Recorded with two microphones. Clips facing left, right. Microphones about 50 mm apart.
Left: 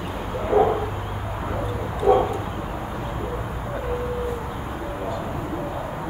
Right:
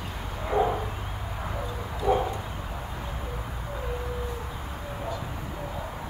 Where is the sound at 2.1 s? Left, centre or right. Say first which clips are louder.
Left 7 dB; left.